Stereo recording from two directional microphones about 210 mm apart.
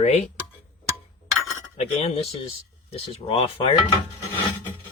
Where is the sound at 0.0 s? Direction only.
30° left (ahead or behind).